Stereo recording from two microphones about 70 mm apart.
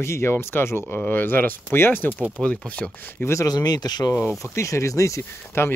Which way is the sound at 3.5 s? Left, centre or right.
Left.